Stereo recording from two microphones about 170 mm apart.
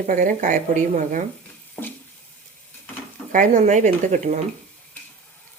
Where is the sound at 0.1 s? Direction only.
50° right (ahead or behind).